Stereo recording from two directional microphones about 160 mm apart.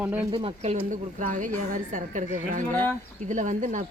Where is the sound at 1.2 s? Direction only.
55° right (ahead or behind).